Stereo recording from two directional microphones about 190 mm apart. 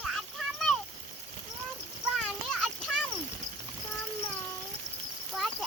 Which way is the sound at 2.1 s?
Centre (ahead or behind).